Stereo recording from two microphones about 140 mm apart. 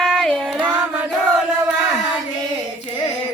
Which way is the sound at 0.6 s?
10° right (ahead or behind).